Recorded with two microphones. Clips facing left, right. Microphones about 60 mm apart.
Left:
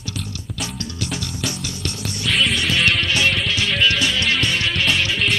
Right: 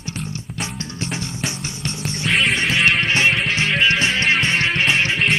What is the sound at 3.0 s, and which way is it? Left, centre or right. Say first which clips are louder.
Music: right 2 dB; right.